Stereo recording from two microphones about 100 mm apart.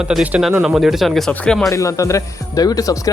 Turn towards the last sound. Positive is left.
turn(degrees=35)  # may be behind; listen again after turning